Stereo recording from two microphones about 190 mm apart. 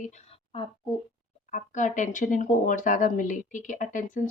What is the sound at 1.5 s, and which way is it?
Speech, 40° left (ahead or behind).